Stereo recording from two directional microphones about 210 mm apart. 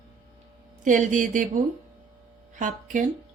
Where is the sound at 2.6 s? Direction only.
40° right (ahead or behind).